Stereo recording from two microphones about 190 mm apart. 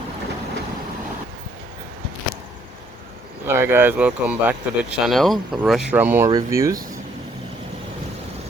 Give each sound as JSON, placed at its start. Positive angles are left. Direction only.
{"t": 3.4, "sound": "speech", "side_deg": -15}
{"t": 5.9, "sound": "speech", "side_deg": -10}